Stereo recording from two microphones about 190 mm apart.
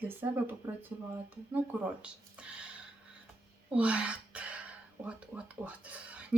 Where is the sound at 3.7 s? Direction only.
5° right (ahead or behind).